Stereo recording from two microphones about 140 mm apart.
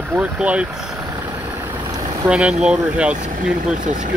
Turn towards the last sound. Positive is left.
turn(degrees=-5)  # may be behind; listen again after turning